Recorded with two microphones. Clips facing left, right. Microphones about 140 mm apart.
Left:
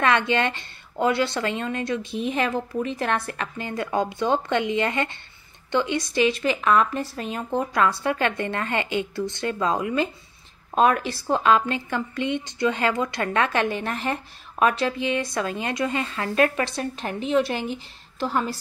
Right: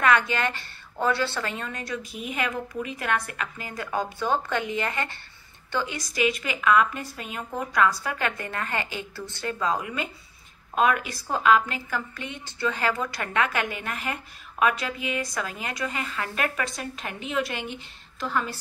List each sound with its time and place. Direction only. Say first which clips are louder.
0.0 s a woman's voice: left 2 dB; 25° left (ahead or behind)